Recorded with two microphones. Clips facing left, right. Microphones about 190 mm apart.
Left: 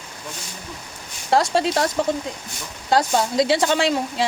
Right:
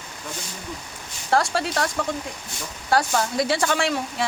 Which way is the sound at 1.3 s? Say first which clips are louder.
Left 4 dB; 20° left (ahead or behind).